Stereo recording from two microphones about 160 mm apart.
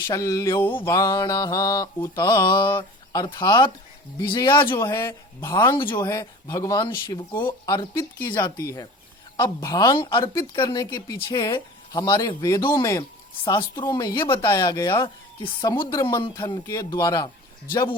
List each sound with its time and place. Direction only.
0.1 s speech: 20° left (ahead or behind)
6.1 s speech: 20° left (ahead or behind)